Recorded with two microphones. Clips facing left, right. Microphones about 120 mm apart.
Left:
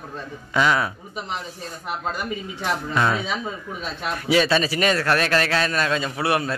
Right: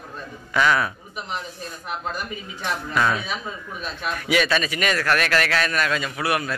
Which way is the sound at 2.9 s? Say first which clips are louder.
Even; 25° left (ahead or behind).